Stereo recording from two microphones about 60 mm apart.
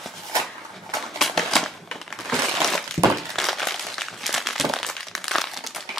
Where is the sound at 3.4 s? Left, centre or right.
Centre.